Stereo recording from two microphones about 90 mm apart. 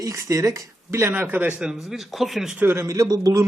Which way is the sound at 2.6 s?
25° right (ahead or behind).